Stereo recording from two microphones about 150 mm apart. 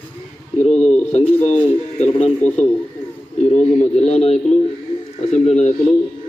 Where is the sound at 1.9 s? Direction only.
50° left (ahead or behind).